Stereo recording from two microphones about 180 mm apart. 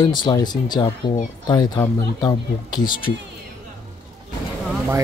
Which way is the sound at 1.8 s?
10° left (ahead or behind).